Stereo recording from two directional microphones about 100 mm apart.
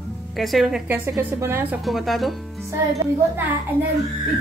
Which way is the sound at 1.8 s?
Centre (ahead or behind).